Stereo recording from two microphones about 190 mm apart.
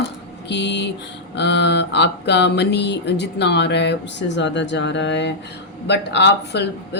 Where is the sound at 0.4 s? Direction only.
65° left (ahead or behind).